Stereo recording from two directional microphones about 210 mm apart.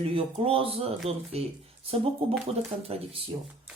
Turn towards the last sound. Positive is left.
turn(degrees=-25)  # may be behind; listen again after turning